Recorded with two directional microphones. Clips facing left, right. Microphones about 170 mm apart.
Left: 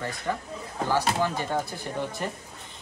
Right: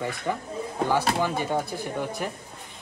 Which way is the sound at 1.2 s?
10° right (ahead or behind).